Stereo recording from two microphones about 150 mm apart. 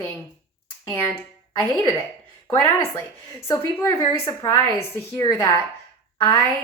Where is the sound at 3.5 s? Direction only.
20° left (ahead or behind).